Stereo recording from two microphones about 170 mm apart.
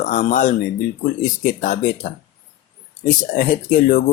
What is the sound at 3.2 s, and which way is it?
Speech, 55° left (ahead or behind).